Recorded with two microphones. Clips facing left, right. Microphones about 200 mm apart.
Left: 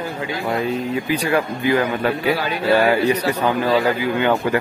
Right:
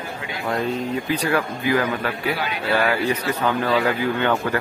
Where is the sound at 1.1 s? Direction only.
10° left (ahead or behind).